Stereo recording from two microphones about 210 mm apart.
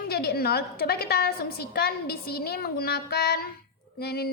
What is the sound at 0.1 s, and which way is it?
A woman's voice, 50° left (ahead or behind).